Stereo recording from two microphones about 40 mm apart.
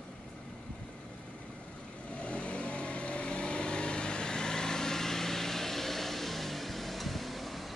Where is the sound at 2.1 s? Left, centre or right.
Left.